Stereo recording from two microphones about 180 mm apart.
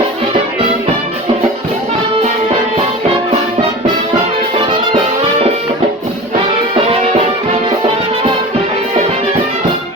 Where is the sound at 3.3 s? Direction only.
40° right (ahead or behind).